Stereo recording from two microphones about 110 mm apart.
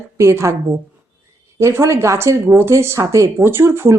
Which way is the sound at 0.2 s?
25° right (ahead or behind).